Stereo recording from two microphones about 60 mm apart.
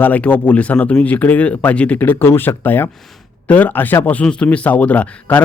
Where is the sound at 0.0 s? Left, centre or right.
Left.